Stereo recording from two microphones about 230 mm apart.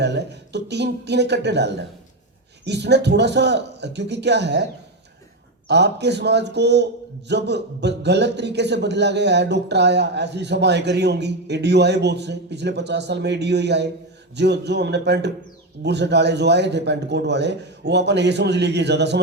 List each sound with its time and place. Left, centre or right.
0.0 s a man's voice: right
5.6 s a man's voice: right